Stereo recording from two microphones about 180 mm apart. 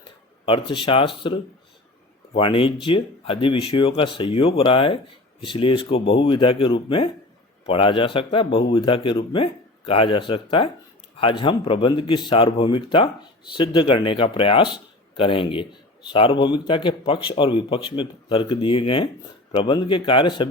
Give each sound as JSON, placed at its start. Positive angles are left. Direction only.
{"t": 0.4, "sound": "speech", "side_deg": 30}